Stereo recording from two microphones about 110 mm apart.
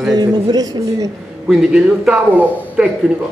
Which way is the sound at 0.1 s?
35° right (ahead or behind).